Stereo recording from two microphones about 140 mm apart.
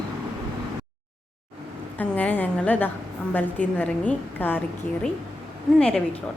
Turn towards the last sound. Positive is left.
turn(degrees=5)  # may be behind; listen again after turning